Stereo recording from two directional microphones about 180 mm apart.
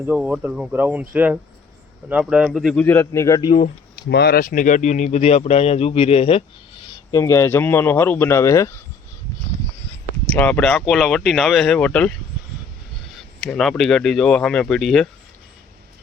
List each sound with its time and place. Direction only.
0.1 s speech: 10° right (ahead or behind)
2.8 s a man's voice: 10° left (ahead or behind)
3.9 s speech: 65° left (ahead or behind); by 6.4 s 30° left (ahead or behind)
6.9 s a man's voice: 20° left (ahead or behind)
10.2 s speech: 10° left (ahead or behind)
13.1 s speech: 5° left (ahead or behind)